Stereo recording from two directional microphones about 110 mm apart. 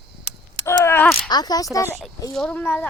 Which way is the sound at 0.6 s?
25° left (ahead or behind).